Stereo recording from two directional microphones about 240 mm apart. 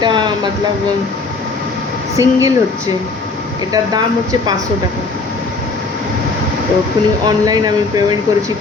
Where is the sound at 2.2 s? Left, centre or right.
Centre.